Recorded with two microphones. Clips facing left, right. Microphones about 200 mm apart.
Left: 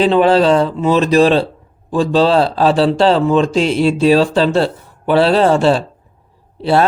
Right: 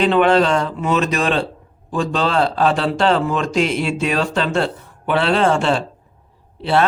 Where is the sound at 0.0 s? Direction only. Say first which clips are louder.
Left 3 dB; 35° left (ahead or behind).